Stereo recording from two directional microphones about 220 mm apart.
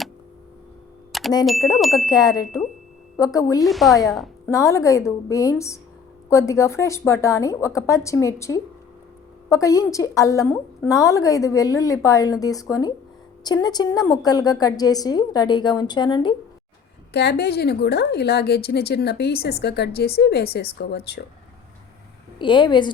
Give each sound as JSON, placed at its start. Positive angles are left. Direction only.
{"t": 1.1, "sound": "ding", "side_deg": 0}
{"t": 1.5, "sound": "speech", "side_deg": 0}
{"t": 2.0, "sound": "a woman's voice", "side_deg": 15}
{"t": 3.6, "sound": "speech", "side_deg": 0}
{"t": 4.4, "sound": "a woman's voice", "side_deg": 15}
{"t": 17.1, "sound": "speech", "side_deg": 50}
{"t": 22.4, "sound": "a woman's voice", "side_deg": 20}